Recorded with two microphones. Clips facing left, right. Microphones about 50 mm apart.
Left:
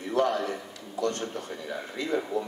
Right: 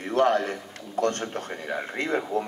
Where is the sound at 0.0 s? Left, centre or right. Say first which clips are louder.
Right 4 dB; right.